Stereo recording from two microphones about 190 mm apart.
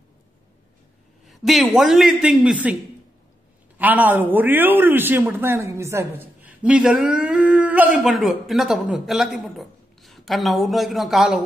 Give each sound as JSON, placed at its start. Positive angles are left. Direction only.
{"t": 1.2, "sound": "a man's voice", "side_deg": 0}